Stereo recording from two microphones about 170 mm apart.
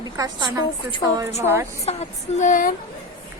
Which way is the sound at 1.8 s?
40° left (ahead or behind).